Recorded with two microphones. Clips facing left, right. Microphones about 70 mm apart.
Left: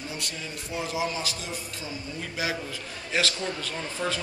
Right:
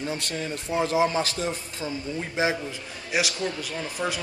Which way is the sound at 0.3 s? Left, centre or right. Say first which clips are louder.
Right 7 dB; right.